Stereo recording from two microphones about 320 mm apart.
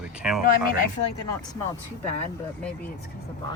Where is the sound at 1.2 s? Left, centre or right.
Centre.